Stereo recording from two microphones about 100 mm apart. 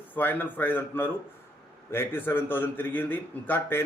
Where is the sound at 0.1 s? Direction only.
20° left (ahead or behind).